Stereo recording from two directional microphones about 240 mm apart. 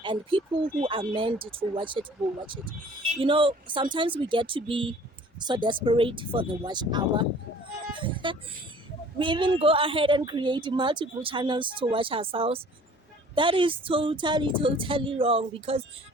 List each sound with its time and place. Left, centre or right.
0.0 s a woman's voice: right